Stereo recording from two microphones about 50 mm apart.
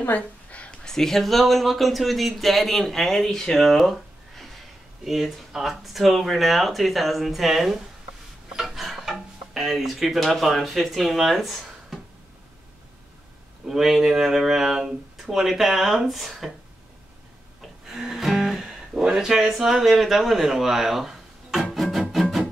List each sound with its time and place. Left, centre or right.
0.1 s a sound: left
0.8 s speech: centre
5.0 s speech: centre
13.7 s speech: centre
17.6 s music: centre